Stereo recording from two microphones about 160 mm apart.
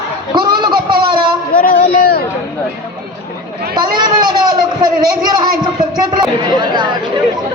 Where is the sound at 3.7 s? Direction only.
30° right (ahead or behind).